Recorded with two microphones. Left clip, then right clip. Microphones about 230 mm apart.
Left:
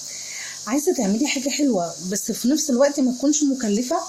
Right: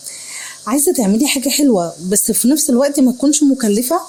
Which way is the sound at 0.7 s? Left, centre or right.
Right.